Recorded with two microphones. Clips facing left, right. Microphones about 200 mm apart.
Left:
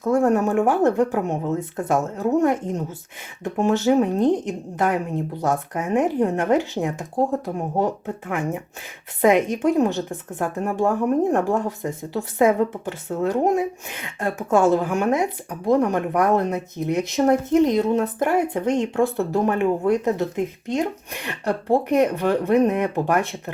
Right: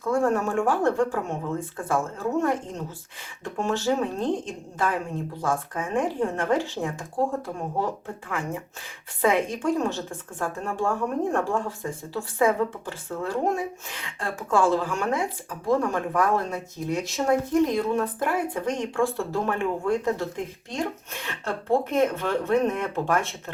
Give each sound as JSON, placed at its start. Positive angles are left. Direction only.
{"t": 0.0, "sound": "a woman's voice", "side_deg": 20}